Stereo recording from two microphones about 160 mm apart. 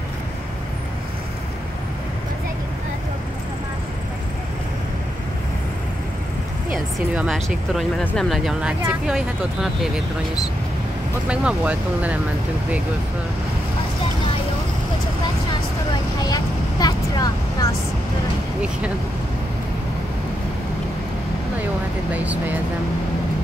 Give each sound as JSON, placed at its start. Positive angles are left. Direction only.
{"t": 7.2, "sound": "speech", "side_deg": 0}
{"t": 8.3, "sound": "speech", "side_deg": -5}
{"t": 11.2, "sound": "speech", "side_deg": -5}
{"t": 16.8, "sound": "vehicle", "side_deg": 25}
{"t": 22.1, "sound": "speech", "side_deg": -10}